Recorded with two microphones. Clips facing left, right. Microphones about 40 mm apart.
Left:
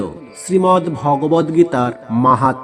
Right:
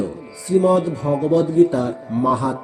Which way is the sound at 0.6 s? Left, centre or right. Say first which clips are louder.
Left 4 dB; left.